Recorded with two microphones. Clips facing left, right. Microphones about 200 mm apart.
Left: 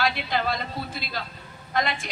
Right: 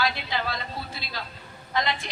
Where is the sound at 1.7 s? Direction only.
50° left (ahead or behind).